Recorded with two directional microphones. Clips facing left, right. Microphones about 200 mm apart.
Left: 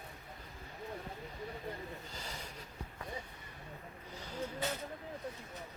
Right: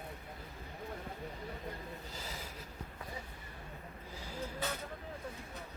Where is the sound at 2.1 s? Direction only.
5° right (ahead or behind).